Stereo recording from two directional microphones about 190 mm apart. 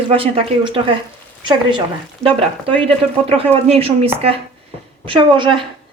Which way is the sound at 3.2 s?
30° right (ahead or behind).